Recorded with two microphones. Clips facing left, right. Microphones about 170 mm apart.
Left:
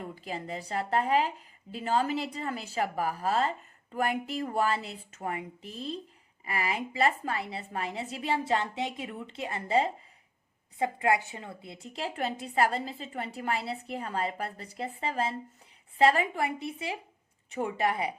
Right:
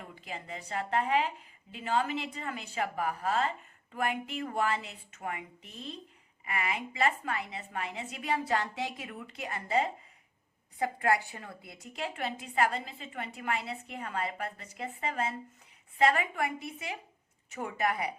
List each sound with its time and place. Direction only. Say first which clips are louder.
0.0 s a woman's voice: left 6 dB; 35° left (ahead or behind)